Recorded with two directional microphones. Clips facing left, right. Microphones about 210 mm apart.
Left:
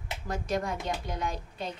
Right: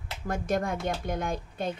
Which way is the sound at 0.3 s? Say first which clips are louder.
Right 3 dB; 50° right (ahead or behind).